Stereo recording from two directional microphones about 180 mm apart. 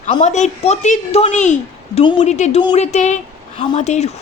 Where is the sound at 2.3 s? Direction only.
40° left (ahead or behind).